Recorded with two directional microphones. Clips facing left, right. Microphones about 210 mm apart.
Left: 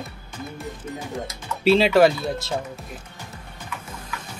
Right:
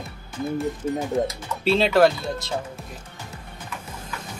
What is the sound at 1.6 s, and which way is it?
Speech, 5° left (ahead or behind).